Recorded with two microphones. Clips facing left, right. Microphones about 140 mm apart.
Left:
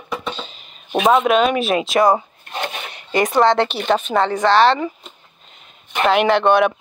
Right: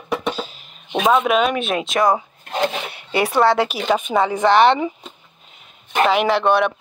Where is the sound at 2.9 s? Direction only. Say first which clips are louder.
Left 2 dB; 5° right (ahead or behind).